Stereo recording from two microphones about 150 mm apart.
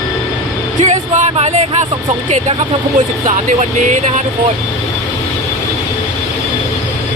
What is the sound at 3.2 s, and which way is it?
Speech, 50° right (ahead or behind).